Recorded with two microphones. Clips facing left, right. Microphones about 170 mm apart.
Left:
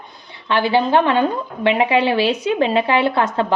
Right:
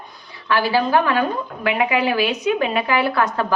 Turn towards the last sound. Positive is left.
turn(degrees=25)  # may be behind; listen again after turning